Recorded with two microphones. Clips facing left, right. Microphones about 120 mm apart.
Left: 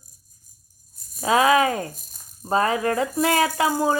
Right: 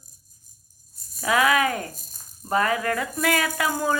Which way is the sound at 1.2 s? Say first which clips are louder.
Left 3 dB; 25° left (ahead or behind).